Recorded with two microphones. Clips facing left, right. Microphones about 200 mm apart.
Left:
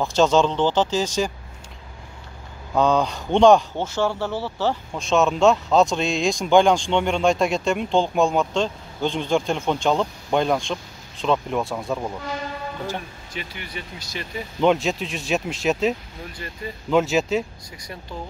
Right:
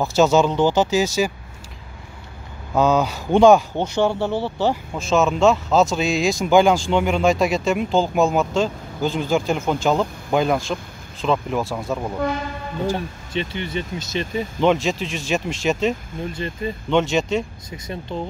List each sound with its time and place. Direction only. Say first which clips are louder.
0.0 s speech: right 2 dB; 5° right (ahead or behind)
2.7 s speech: right 1 dB; 5° right (ahead or behind)
3.7 s speech: right 3 dB; 15° right (ahead or behind)
4.9 s speech: left 1 dB; centre (ahead or behind)
12.9 s speech: right 7 dB; 25° right (ahead or behind)
14.6 s speech: even; centre (ahead or behind)
16.3 s speech: right 7 dB; 25° right (ahead or behind)
16.9 s speech: even; 5° left (ahead or behind)
17.6 s speech: right 7 dB; 25° right (ahead or behind)